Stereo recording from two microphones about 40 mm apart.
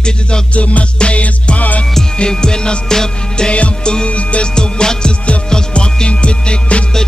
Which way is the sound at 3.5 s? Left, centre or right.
Left.